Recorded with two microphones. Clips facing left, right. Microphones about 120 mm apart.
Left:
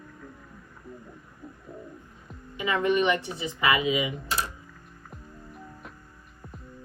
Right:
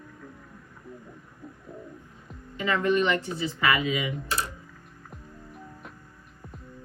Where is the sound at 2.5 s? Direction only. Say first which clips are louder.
Even; 15° left (ahead or behind).